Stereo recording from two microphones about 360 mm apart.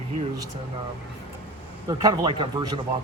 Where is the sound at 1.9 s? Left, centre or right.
Centre.